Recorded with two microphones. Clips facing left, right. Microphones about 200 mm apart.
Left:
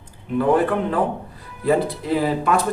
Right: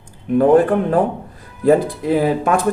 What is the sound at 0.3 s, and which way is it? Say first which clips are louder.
Speech: right 6 dB; 45° right (ahead or behind).